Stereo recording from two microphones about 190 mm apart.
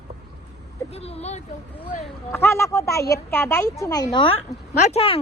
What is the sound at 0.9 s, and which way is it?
Speech, 30° left (ahead or behind).